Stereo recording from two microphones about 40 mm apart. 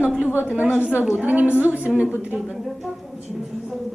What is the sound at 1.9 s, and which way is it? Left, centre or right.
Speech, right.